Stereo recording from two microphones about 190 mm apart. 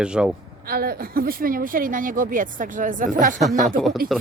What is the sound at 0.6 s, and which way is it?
Speech, 55° right (ahead or behind).